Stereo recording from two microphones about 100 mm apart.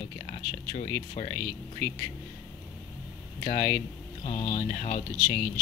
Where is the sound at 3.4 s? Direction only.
50° left (ahead or behind).